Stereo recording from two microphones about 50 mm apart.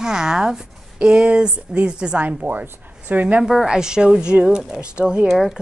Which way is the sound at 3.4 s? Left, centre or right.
Centre.